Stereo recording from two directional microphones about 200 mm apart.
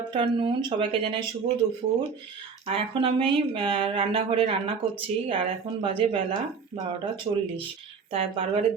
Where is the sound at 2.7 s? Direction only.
25° right (ahead or behind).